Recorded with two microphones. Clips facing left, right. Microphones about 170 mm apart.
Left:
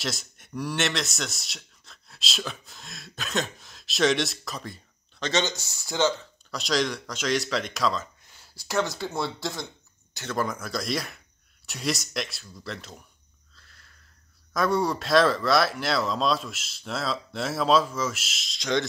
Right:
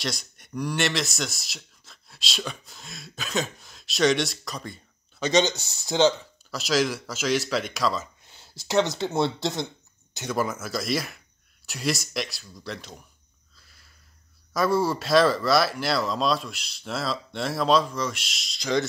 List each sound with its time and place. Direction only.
0.0 s speech: centre (ahead or behind)
5.2 s speech: 15° right (ahead or behind)
6.5 s speech: 5° right (ahead or behind)
8.2 s speech: 25° right (ahead or behind)
10.1 s speech: 10° right (ahead or behind)
13.6 s a sound: 10° right (ahead or behind)
14.5 s speech: centre (ahead or behind)